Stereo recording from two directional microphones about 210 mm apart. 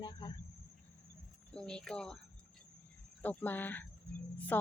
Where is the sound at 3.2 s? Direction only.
10° left (ahead or behind).